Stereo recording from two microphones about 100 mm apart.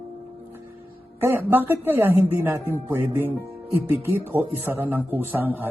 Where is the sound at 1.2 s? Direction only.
20° right (ahead or behind).